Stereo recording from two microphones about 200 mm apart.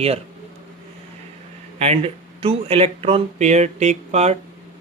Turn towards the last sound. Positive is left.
turn(degrees=-35)  # may be behind; listen again after turning